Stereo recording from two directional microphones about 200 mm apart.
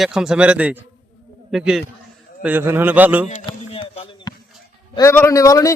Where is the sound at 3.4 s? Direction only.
25° left (ahead or behind).